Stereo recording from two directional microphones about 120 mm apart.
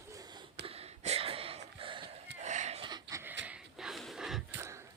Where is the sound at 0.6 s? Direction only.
55° right (ahead or behind).